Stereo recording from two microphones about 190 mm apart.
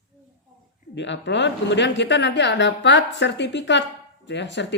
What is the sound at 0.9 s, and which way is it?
Speech, 70° left (ahead or behind).